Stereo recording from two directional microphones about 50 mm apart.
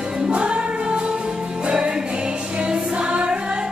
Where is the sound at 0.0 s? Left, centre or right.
Centre.